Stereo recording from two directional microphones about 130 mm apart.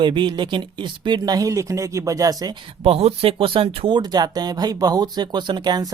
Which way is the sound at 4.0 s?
30° right (ahead or behind).